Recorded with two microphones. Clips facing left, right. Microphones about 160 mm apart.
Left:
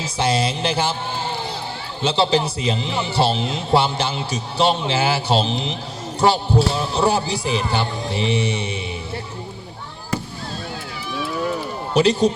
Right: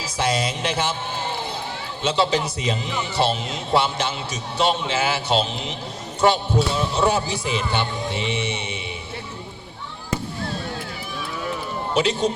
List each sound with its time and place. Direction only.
0.0 s a man's voice: 30° left (ahead or behind)
2.0 s a man's voice: 30° left (ahead or behind)
11.9 s a man's voice: 35° left (ahead or behind)